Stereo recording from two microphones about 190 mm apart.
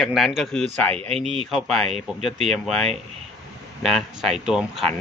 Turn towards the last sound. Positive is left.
turn(degrees=0)  # may be behind; listen again after turning